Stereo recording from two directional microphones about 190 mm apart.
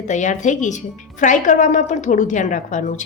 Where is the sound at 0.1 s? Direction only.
40° left (ahead or behind).